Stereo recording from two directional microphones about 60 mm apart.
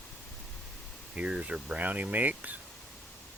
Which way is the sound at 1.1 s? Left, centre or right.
Right.